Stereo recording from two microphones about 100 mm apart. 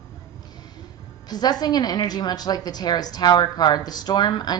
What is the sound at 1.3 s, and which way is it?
A woman's voice, 45° left (ahead or behind).